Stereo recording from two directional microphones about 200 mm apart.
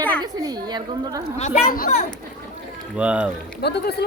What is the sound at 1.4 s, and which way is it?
Speech, 40° left (ahead or behind).